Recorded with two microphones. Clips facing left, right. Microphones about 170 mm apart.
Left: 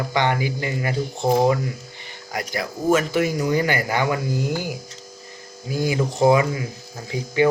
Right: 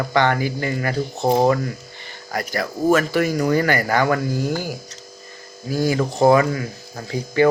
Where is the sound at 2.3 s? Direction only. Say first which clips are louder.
Right 3 dB; 15° left (ahead or behind).